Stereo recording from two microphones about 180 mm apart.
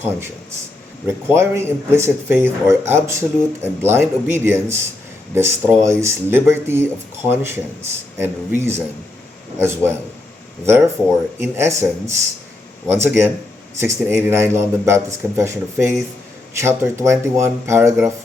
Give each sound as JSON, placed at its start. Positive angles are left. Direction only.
{"t": 1.0, "sound": "speech", "side_deg": -15}
{"t": 11.3, "sound": "speech", "side_deg": -15}